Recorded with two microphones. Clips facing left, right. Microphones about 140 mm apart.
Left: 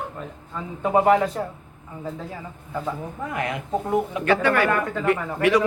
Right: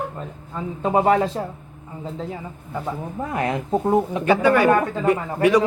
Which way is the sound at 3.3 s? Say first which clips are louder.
Right 4 dB; 35° right (ahead or behind).